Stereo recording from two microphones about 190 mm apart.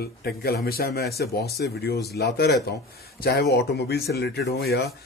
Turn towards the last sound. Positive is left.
turn(degrees=55)  # may be behind; listen again after turning